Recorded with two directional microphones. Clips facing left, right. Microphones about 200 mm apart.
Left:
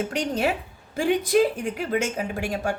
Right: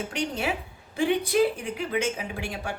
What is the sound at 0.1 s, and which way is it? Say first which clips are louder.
Speech: left 4 dB; 40° left (ahead or behind).